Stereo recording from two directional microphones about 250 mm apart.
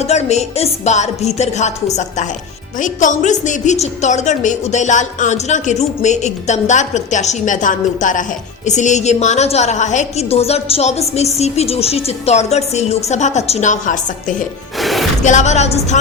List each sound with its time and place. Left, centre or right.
0.0 s a woman's voice: left
14.8 s music: centre
15.2 s a woman's voice: left